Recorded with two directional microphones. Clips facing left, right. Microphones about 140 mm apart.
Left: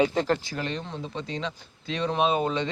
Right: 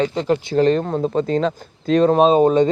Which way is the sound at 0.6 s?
45° right (ahead or behind).